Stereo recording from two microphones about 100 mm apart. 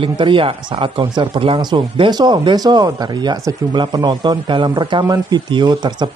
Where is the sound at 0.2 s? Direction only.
60° right (ahead or behind).